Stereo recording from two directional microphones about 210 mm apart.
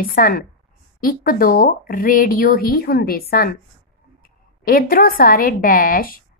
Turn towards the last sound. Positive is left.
turn(degrees=45)  # may be behind; listen again after turning